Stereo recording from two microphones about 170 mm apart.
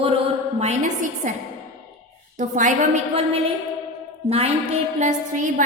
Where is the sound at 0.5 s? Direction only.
45° right (ahead or behind).